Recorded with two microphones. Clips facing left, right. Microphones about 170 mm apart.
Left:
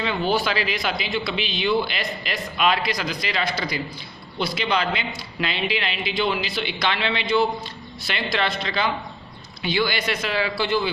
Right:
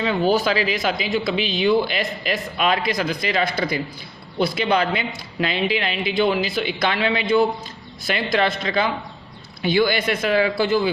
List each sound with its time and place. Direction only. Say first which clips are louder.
0.0 s speech: right 4 dB; 40° right (ahead or behind)